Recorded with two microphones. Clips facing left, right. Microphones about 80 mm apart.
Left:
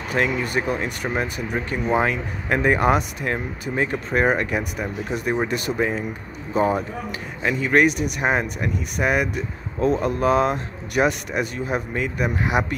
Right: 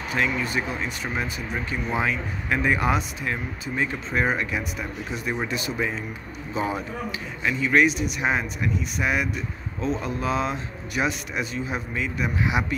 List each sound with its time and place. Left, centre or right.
0.1 s speech: left